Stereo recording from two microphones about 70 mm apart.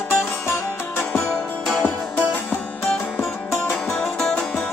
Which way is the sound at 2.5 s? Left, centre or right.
Centre.